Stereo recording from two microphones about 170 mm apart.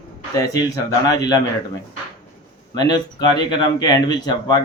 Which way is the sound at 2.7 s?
25° left (ahead or behind).